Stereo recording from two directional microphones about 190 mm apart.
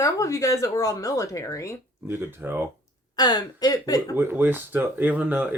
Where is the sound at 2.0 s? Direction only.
10° right (ahead or behind).